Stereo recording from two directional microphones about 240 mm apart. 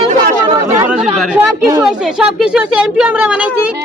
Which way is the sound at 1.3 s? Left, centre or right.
Centre.